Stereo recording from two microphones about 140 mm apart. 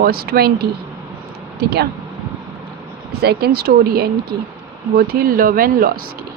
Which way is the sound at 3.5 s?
90° right.